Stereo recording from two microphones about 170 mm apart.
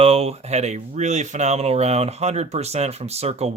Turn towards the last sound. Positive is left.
turn(degrees=-35)  # may be behind; listen again after turning